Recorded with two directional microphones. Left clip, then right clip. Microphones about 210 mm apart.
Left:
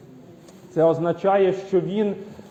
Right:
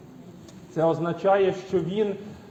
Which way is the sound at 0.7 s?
45° left (ahead or behind).